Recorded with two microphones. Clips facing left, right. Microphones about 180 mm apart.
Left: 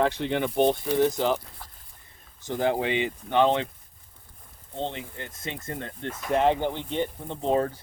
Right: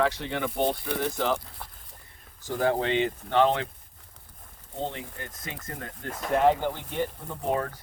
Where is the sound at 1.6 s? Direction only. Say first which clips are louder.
Right 3 dB; 60° right (ahead or behind).